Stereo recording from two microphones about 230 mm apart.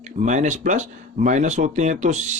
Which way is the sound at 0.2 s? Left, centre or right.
Right.